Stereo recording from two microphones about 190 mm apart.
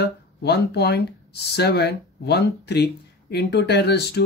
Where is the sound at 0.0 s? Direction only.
60° left (ahead or behind).